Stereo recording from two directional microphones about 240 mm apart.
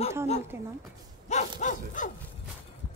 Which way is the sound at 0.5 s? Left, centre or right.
Centre.